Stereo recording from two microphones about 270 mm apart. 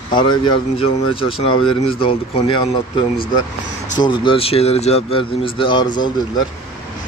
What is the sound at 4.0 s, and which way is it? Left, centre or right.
Speech, centre.